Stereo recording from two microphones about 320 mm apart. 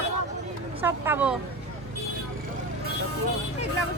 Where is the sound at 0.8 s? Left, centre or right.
Centre.